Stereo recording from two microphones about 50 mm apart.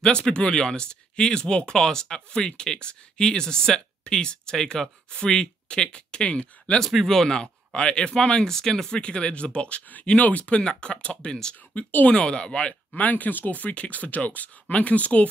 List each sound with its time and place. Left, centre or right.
0.0 s speech: centre
6.8 s speech: centre
7.1 s speech: centre; by 10.6 s left
10.6 s speech: centre
11.7 s speech: left
12.1 s speech: centre